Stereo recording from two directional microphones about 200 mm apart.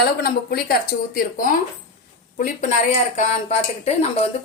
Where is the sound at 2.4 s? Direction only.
35° left (ahead or behind).